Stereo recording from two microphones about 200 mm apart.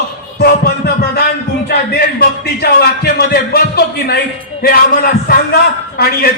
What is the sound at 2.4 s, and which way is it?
Speech, 50° left (ahead or behind).